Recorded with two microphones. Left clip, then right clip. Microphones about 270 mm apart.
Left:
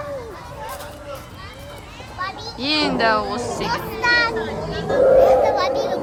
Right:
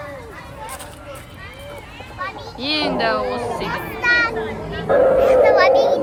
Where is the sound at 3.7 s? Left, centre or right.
Left.